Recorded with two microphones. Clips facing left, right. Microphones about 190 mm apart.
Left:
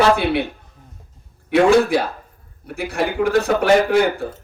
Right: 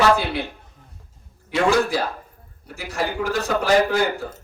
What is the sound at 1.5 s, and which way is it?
A man's voice, 60° left (ahead or behind).